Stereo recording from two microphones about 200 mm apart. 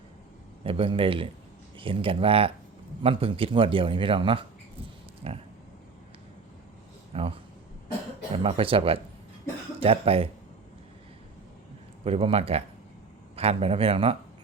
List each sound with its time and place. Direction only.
0.6 s speech: 25° right (ahead or behind)
7.1 s speech: 30° right (ahead or behind)
12.0 s a man's voice: 30° right (ahead or behind)